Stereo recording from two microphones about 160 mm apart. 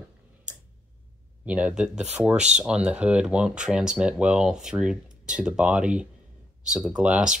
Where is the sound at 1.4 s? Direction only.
10° right (ahead or behind).